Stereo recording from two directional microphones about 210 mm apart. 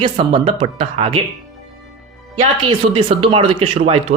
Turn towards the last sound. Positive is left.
turn(degrees=-25)  # may be behind; listen again after turning